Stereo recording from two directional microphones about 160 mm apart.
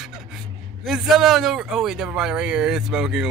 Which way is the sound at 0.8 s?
5° right (ahead or behind).